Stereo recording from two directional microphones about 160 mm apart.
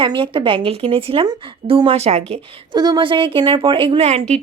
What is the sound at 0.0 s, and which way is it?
Speech, 30° right (ahead or behind).